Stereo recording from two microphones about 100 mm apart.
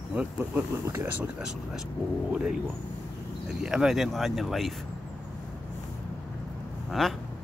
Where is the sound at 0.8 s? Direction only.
25° right (ahead or behind).